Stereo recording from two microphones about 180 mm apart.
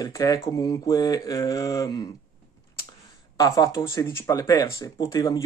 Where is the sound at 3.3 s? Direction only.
20° left (ahead or behind).